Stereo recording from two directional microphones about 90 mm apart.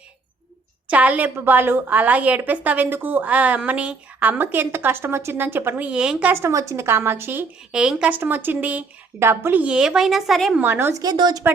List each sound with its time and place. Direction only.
0.9 s a woman's voice: 15° right (ahead or behind)
6.3 s a woman's voice: 30° right (ahead or behind)
7.7 s a woman's voice: 10° right (ahead or behind)
8.2 s a woman's voice: 25° right (ahead or behind); by 10.6 s centre (ahead or behind)
10.6 s a woman's voice: 25° right (ahead or behind)
11.0 s speech: 50° right (ahead or behind)